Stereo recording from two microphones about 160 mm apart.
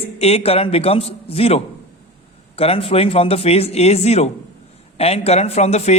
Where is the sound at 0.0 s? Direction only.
40° left (ahead or behind).